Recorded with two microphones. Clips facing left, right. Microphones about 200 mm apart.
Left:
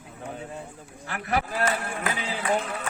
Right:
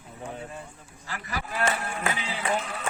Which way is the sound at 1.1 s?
65° left (ahead or behind).